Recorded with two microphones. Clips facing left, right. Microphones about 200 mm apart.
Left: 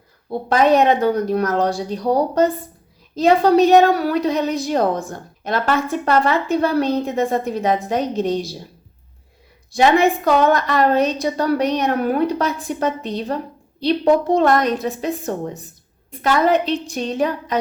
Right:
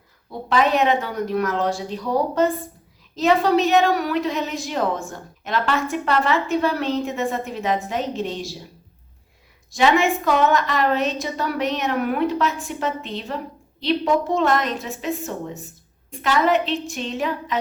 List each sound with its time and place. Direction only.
0.3 s a woman's voice: 40° left (ahead or behind)
9.8 s a woman's voice: 35° left (ahead or behind)
16.2 s a woman's voice: 40° left (ahead or behind)